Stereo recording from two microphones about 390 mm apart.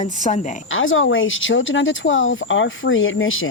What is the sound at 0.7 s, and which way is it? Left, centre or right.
Speech, left.